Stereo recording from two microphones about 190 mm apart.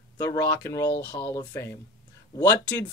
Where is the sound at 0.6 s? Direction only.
15° left (ahead or behind).